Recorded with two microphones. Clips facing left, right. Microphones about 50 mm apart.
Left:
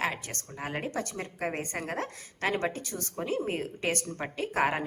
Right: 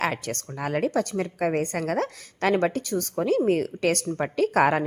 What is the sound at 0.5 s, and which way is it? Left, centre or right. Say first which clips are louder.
A woman's voice: right 9 dB; right.